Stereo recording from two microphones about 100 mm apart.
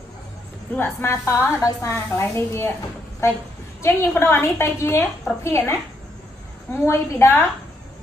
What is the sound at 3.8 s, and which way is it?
A woman's voice, 25° left (ahead or behind).